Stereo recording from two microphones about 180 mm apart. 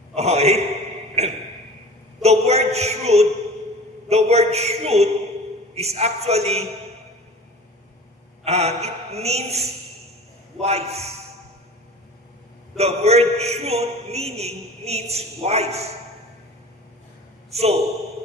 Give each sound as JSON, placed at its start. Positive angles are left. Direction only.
{"t": 0.1, "sound": "a man's voice", "side_deg": -35}
{"t": 1.2, "sound": "a sound", "side_deg": -35}
{"t": 5.8, "sound": "a man's voice", "side_deg": -35}
{"t": 8.5, "sound": "a man's voice", "side_deg": -35}
{"t": 12.7, "sound": "a man's voice", "side_deg": -35}
{"t": 17.5, "sound": "a sound", "side_deg": -35}